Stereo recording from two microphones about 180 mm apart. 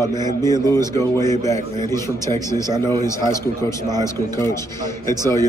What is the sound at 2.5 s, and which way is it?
Speech, 20° right (ahead or behind).